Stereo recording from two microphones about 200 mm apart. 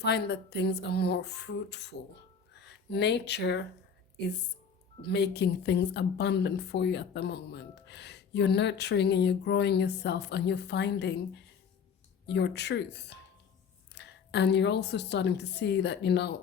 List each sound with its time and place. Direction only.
0.0 s speech: 55° left (ahead or behind)
5.0 s a woman's voice: 55° left (ahead or behind)